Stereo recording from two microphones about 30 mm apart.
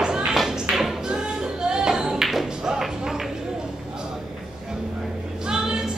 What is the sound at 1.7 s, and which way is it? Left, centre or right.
Music, right.